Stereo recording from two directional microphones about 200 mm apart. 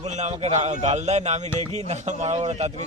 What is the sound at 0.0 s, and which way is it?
Speech, 35° right (ahead or behind).